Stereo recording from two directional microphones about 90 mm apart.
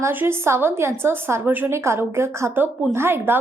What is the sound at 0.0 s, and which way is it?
A woman's voice, 25° right (ahead or behind).